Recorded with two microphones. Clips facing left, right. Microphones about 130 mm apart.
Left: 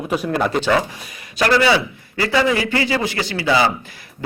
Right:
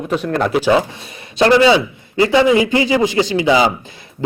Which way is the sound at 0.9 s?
25° right (ahead or behind).